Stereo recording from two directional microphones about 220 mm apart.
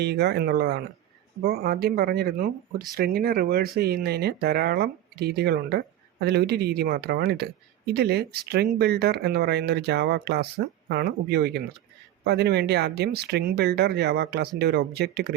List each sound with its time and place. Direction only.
0.0 s speech: 50° right (ahead or behind)